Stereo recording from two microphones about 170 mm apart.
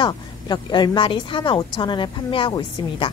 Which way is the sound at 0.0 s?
25° left (ahead or behind).